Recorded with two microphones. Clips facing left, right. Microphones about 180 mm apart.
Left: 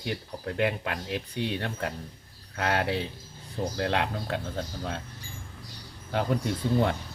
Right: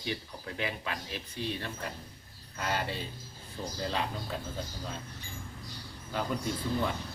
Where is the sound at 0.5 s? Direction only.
60° left (ahead or behind); by 5.0 s 80° left.